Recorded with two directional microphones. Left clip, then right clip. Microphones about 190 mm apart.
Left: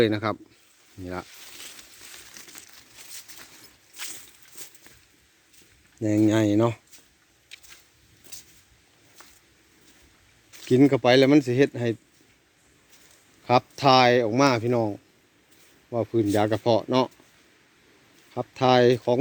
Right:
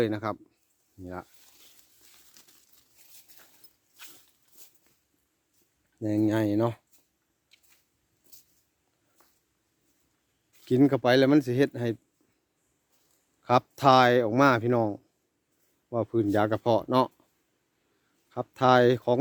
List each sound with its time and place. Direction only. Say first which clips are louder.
0.0 s speech: left 6 dB; 10° right (ahead or behind)
2.4 s crumpling: left 12 dB; 30° right (ahead or behind)
4.6 s a sound: left 12 dB; centre (ahead or behind)
6.0 s speech: left 5 dB; 10° right (ahead or behind)
7.5 s a sound: left 16 dB; 5° right (ahead or behind)
10.7 s speech: left 4 dB; 20° right (ahead or behind)
13.4 s speech: left 2 dB; 30° right (ahead or behind)
18.3 s speech: left 1 dB; 25° right (ahead or behind)